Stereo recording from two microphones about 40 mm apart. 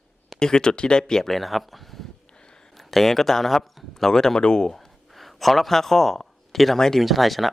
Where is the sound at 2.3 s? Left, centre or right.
Left.